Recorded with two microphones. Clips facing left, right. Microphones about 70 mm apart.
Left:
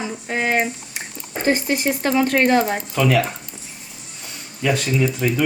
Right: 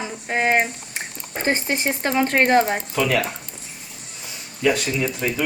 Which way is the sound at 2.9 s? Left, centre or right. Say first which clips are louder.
Left 3 dB; centre.